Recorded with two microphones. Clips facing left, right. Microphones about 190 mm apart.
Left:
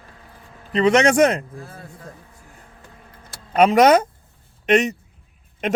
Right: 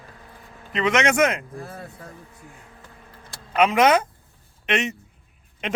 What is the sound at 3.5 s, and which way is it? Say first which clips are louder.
A man's voice: left 4 dB; 40° left (ahead or behind).